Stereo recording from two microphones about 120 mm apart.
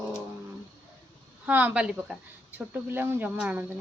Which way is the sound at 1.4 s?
15° right (ahead or behind).